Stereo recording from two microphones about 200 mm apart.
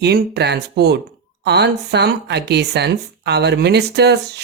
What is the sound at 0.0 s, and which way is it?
Speech, 55° right (ahead or behind).